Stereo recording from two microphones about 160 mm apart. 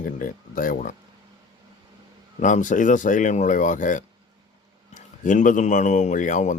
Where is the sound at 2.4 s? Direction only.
50° left (ahead or behind).